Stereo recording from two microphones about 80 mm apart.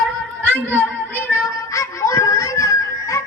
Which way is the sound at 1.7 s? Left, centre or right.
Left.